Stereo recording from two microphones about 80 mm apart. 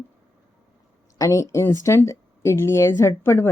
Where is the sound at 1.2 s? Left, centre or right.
Left.